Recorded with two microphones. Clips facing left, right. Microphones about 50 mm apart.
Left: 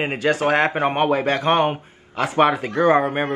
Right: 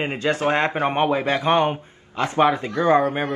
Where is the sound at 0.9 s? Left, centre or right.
Centre.